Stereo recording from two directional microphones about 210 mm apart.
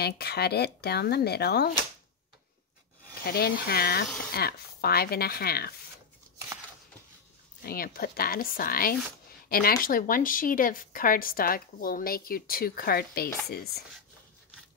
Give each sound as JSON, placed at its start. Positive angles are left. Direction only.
{"t": 0.0, "sound": "a woman's voice", "side_deg": 50}
{"t": 3.3, "sound": "a woman's voice", "side_deg": 50}
{"t": 7.6, "sound": "a woman's voice", "side_deg": 45}